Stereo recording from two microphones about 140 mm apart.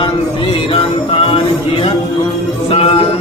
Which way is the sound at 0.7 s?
40° left (ahead or behind).